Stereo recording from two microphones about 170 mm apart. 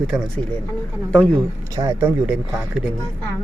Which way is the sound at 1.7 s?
20° right (ahead or behind).